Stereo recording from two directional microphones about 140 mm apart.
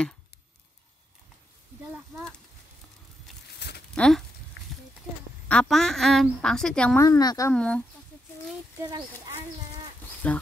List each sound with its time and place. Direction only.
3.9 s speech: 5° left (ahead or behind)
5.5 s a woman's voice: 5° left (ahead or behind)
7.0 s a woman's voice: 25° left (ahead or behind)
7.5 s speech: 5° left (ahead or behind)
10.2 s speech: 10° left (ahead or behind)